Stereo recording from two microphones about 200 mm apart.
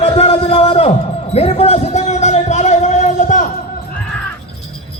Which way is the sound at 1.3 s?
30° left (ahead or behind).